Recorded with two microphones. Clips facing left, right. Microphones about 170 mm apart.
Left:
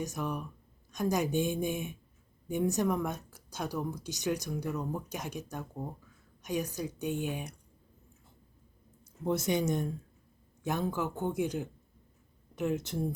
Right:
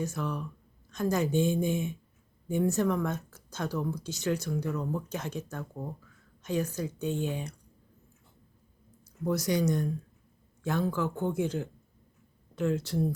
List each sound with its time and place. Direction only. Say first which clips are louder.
0.0 s speech: right 2 dB; 15° left (ahead or behind)
9.2 s speech: right 2 dB; 25° left (ahead or behind)